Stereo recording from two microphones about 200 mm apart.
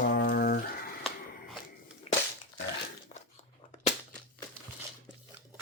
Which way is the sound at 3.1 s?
35° left (ahead or behind).